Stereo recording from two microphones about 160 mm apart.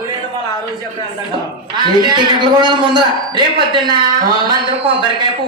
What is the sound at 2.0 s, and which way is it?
A man's voice, 30° right (ahead or behind).